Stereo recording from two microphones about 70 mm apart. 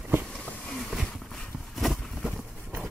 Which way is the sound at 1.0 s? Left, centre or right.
Centre.